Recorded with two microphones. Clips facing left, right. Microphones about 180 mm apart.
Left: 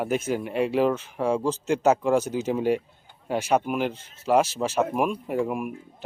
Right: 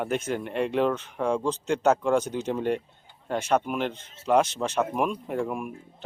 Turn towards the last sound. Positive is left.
turn(degrees=5)  # may be behind; listen again after turning